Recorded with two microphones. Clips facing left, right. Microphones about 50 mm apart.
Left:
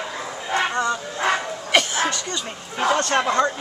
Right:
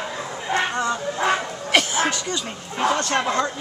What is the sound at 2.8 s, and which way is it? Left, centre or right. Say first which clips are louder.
Speech: left 1 dB; left.